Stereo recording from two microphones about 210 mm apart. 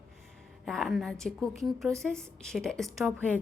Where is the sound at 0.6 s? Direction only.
Centre (ahead or behind).